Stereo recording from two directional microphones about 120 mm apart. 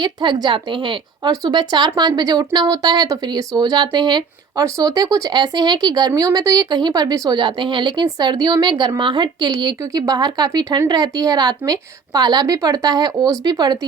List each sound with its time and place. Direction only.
0.0 s a woman's voice: 35° right (ahead or behind)